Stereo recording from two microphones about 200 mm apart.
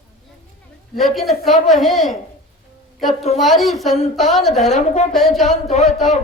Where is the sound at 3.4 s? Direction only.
Centre (ahead or behind).